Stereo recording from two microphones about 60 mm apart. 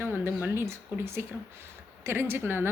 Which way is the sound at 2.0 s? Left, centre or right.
Right.